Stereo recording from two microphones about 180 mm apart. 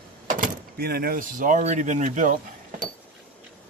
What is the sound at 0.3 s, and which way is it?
Speech, 55° right (ahead or behind).